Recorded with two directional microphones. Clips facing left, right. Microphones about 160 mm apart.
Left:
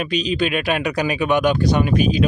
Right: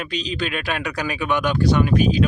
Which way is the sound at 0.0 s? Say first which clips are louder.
Left 6 dB; 15° left (ahead or behind).